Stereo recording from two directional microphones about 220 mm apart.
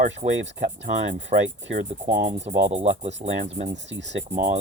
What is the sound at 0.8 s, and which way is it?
Speech, 30° right (ahead or behind).